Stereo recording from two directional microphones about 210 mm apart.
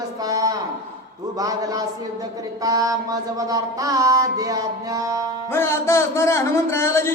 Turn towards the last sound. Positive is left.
turn(degrees=10)  # may be behind; listen again after turning